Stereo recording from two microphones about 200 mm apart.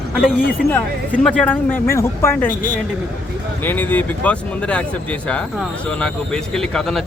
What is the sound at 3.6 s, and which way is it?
Speech, 10° left (ahead or behind).